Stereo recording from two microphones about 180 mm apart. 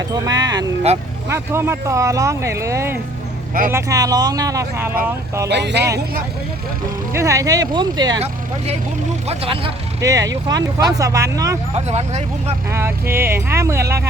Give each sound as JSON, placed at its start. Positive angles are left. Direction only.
{"t": 0.1, "sound": "speech", "side_deg": -20}
{"t": 5.5, "sound": "speech", "side_deg": -70}
{"t": 7.1, "sound": "speech", "side_deg": -15}
{"t": 9.2, "sound": "speech", "side_deg": -30}
{"t": 10.0, "sound": "speech", "side_deg": -20}
{"t": 11.9, "sound": "speech", "side_deg": -35}
{"t": 12.7, "sound": "speech", "side_deg": -15}